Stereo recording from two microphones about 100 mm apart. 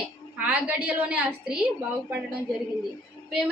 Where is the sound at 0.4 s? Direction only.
15° right (ahead or behind).